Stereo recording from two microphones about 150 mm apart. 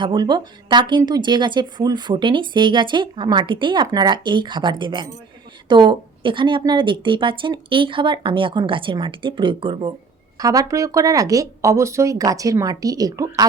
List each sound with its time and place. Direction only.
0.0 s a woman's voice: 30° right (ahead or behind)
10.3 s speech: 25° right (ahead or behind)